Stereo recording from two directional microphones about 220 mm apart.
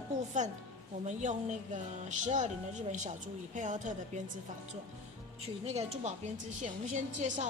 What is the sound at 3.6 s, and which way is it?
Speech, 35° right (ahead or behind).